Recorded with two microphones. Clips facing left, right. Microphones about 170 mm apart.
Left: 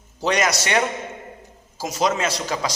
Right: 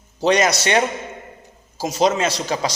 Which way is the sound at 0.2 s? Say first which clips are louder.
Right 4 dB; 30° right (ahead or behind).